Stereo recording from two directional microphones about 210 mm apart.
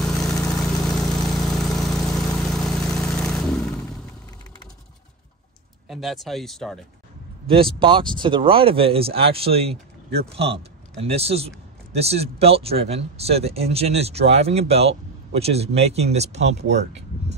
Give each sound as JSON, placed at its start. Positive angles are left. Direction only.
{"t": 0.0, "sound": "vehicle", "side_deg": 5}
{"t": 5.9, "sound": "speech", "side_deg": 0}
{"t": 7.8, "sound": "speech", "side_deg": -25}